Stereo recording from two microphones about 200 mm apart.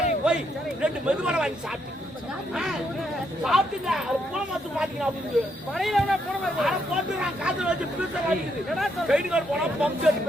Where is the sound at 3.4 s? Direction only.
Centre (ahead or behind).